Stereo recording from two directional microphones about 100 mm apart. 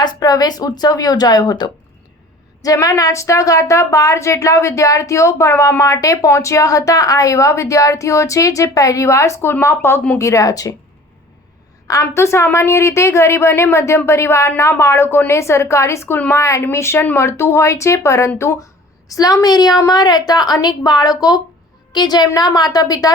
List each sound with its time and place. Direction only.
0.0 s a woman's voice: 45° left (ahead or behind)
2.8 s a woman's voice: 35° left (ahead or behind)
11.9 s a woman's voice: 30° left (ahead or behind)